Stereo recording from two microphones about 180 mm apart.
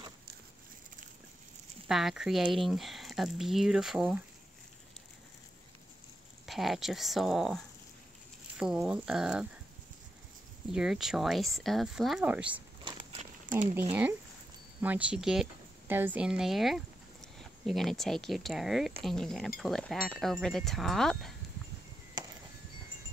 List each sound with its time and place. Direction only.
1.9 s speech: centre (ahead or behind)
6.4 s speech: centre (ahead or behind)
10.7 s speech: 5° right (ahead or behind)
12.8 s a sound: 30° right (ahead or behind)
14.8 s speech: 10° right (ahead or behind)